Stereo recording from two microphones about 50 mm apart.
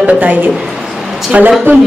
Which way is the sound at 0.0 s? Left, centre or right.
Right.